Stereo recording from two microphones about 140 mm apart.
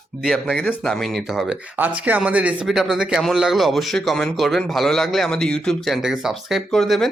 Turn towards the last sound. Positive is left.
turn(degrees=5)  # may be behind; listen again after turning